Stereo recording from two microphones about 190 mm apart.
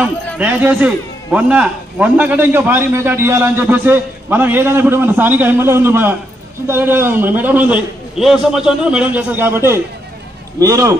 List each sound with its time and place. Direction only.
0.0 s speech: 10° right (ahead or behind)